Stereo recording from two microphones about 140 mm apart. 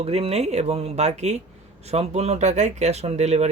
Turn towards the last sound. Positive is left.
turn(degrees=-50)  # may be behind; listen again after turning